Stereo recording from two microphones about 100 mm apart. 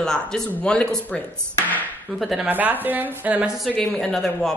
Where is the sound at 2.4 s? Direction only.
20° right (ahead or behind).